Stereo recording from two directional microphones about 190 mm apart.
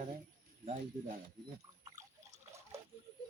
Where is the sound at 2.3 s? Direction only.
35° right (ahead or behind).